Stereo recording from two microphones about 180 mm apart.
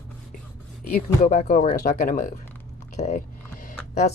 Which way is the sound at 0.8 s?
60° left (ahead or behind).